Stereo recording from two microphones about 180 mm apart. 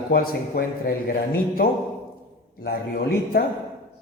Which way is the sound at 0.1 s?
55° left (ahead or behind).